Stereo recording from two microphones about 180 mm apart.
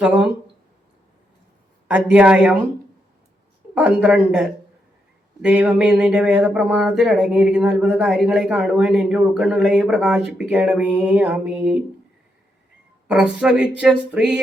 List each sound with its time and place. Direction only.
0.0 s speech: 5° right (ahead or behind)
1.9 s speech: 5° right (ahead or behind)
3.8 s speech: 5° right (ahead or behind)
13.1 s speech: 5° right (ahead or behind)